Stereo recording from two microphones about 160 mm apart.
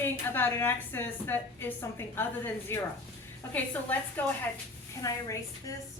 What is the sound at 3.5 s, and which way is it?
Speech, 10° left (ahead or behind).